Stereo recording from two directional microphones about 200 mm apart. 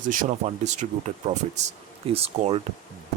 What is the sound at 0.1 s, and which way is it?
Speech, 40° right (ahead or behind).